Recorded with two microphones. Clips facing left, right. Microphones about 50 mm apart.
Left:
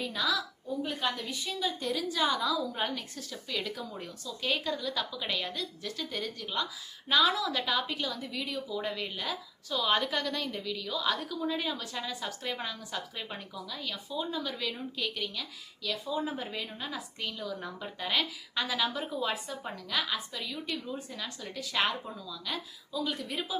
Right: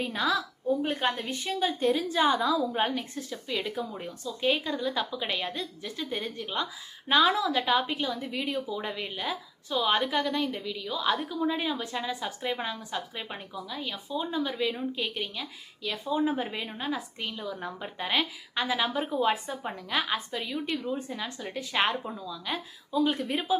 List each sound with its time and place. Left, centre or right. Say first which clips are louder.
0.0 s a woman's voice: right 3 dB; right
8.7 s a woman's voice: right 1 dB; centre